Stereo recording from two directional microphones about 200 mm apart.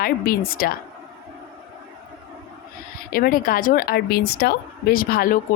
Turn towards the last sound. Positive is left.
turn(degrees=45)  # may be behind; listen again after turning